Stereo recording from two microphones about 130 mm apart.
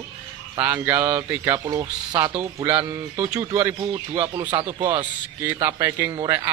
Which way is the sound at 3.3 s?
20° right (ahead or behind).